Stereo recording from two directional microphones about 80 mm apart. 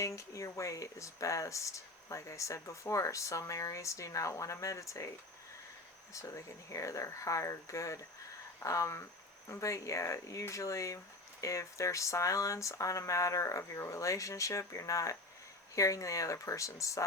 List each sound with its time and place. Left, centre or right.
0.0 s speech: left
6.1 s speech: left